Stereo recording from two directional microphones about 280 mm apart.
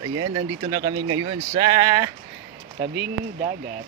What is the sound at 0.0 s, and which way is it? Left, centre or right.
Speech, centre.